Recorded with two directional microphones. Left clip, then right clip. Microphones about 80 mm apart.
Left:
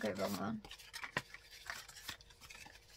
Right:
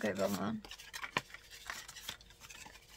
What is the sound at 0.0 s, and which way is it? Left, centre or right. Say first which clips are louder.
Speech: right 4 dB; right.